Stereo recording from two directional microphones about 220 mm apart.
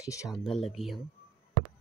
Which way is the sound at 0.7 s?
Centre (ahead or behind).